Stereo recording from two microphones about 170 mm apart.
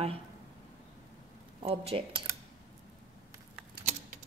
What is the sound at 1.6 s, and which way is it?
Speech, 35° right (ahead or behind).